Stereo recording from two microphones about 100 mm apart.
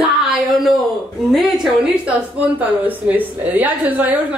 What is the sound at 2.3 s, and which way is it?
A woman's voice, 15° right (ahead or behind).